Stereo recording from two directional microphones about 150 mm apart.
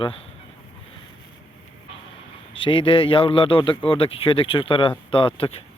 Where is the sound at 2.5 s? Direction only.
35° left (ahead or behind).